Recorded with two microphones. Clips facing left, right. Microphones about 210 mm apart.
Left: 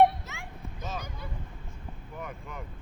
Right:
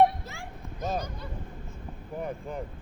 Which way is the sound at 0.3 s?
35° right (ahead or behind).